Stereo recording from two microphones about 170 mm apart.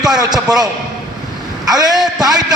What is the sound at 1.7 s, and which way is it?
Speech, 25° right (ahead or behind).